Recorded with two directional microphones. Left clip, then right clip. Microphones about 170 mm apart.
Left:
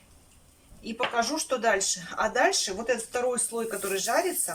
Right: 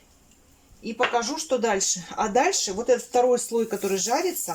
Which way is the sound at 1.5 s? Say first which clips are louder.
Right 5 dB; 30° right (ahead or behind).